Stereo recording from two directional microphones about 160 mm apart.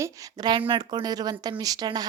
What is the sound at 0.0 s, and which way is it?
A woman's voice, 20° right (ahead or behind).